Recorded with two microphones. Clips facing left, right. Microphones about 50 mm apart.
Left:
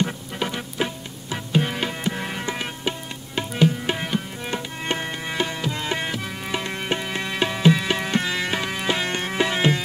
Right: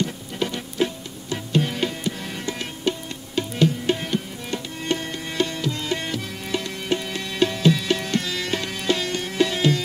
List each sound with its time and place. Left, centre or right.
0.4 s music: centre
2.0 s music: left
3.3 s tabla: centre
6.6 s music: left